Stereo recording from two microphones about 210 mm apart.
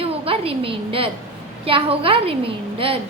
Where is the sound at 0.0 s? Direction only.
25° right (ahead or behind).